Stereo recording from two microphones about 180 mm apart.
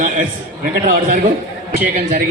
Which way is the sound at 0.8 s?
55° right (ahead or behind).